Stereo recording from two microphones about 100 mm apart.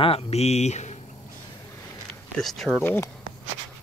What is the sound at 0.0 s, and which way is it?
Speech, 80° left.